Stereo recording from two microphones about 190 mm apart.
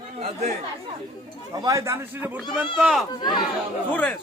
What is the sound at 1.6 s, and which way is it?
A man's voice, 15° right (ahead or behind).